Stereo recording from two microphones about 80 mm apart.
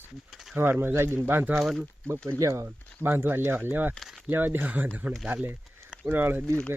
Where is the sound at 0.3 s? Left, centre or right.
Centre.